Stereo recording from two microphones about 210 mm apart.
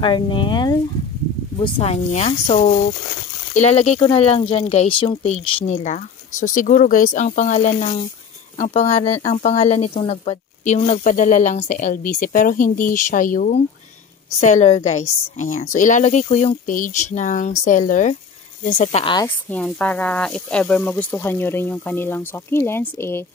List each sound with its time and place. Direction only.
0.0 s speech: 25° left (ahead or behind); by 18.9 s 40° left (ahead or behind)
18.9 s speech: 25° left (ahead or behind)
19.2 s speech: 5° left (ahead or behind)